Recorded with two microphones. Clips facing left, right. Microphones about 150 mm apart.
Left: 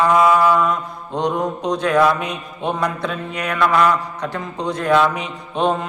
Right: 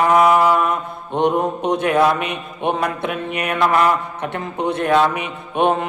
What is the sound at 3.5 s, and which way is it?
Mantra, 25° right (ahead or behind).